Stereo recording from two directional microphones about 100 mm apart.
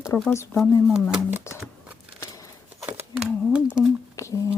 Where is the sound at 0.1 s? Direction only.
20° left (ahead or behind).